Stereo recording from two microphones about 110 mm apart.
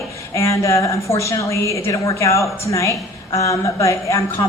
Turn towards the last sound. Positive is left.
turn(degrees=30)  # may be behind; listen again after turning